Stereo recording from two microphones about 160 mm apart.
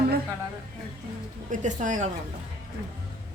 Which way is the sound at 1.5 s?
50° right (ahead or behind).